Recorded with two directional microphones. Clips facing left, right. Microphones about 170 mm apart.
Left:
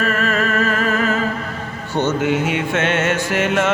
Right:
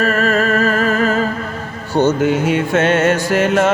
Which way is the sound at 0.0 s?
40° right (ahead or behind).